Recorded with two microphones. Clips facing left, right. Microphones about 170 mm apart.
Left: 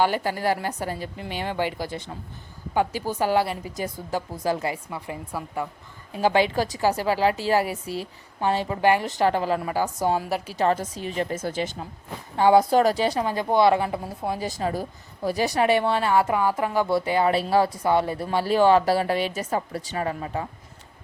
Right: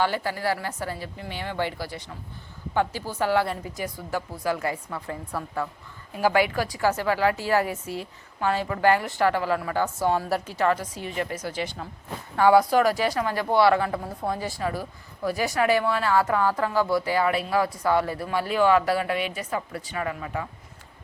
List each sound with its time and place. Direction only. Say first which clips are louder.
0.0 s a woman's voice: left 3 dB; 20° left (ahead or behind)
7.4 s a woman's voice: left 1 dB; 15° left (ahead or behind)
10.2 s a woman's voice: right 1 dB; centre (ahead or behind)
11.1 s a woman's voice: left 3 dB; 30° left (ahead or behind)
14.2 s a woman's voice: even; 5° left (ahead or behind)
14.4 s a woman's voice: left 2 dB; 20° left (ahead or behind)
15.2 s a woman's voice: left 2 dB; 35° left (ahead or behind)